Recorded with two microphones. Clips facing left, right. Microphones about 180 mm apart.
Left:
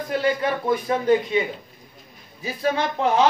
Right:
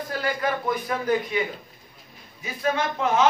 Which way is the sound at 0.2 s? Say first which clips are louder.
Left 1 dB; 25° left (ahead or behind).